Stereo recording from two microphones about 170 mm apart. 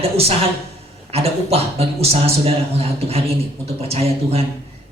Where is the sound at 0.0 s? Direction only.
35° right (ahead or behind).